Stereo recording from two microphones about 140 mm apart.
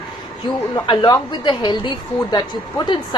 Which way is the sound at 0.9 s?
35° left (ahead or behind).